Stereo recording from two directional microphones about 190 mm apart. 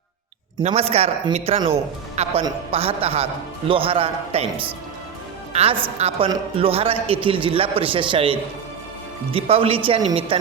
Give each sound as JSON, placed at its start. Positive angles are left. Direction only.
{"t": 0.6, "sound": "a man's voice", "side_deg": -35}
{"t": 6.0, "sound": "a man's voice", "side_deg": -30}